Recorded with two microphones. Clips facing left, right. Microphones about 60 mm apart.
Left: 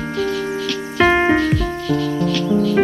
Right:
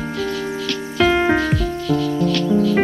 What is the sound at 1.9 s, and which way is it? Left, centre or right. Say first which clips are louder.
Music: right 1 dB; centre.